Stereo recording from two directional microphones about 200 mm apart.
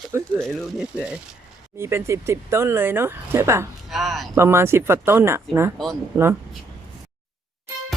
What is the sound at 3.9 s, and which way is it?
Speech, centre (ahead or behind).